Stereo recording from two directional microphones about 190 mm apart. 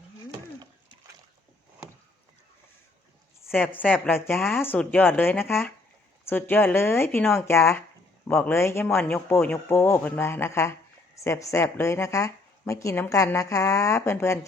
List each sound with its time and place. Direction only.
3.5 s a man's voice: 10° left (ahead or behind)